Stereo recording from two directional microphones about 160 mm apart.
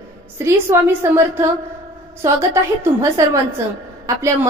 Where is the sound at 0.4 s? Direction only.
15° right (ahead or behind).